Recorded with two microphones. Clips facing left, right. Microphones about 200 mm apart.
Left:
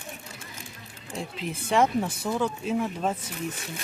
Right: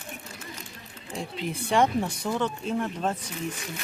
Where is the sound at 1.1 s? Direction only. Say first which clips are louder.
Right 1 dB; centre (ahead or behind).